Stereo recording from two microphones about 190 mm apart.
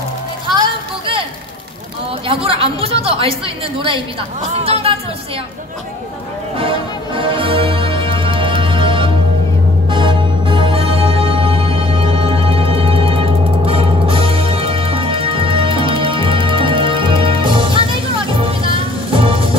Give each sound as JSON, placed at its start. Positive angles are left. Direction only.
{"t": 0.6, "sound": "a sound", "side_deg": -30}
{"t": 2.2, "sound": "a woman's voice", "side_deg": -30}
{"t": 6.5, "sound": "music", "side_deg": -30}